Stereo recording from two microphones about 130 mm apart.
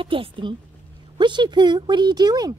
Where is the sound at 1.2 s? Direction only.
35° right (ahead or behind).